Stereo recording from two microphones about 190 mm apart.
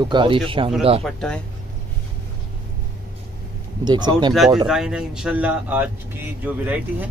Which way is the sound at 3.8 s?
25° right (ahead or behind).